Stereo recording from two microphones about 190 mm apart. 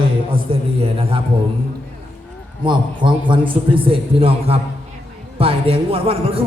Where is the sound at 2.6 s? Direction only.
25° right (ahead or behind).